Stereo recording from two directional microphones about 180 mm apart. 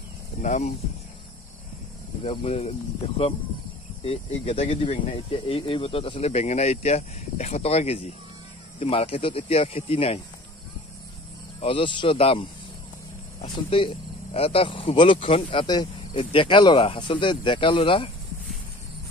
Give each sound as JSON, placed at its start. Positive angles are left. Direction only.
{"t": 0.4, "sound": "speech", "side_deg": 40}
{"t": 2.2, "sound": "speech", "side_deg": 35}
{"t": 4.0, "sound": "speech", "side_deg": 35}
{"t": 11.6, "sound": "speech", "side_deg": 30}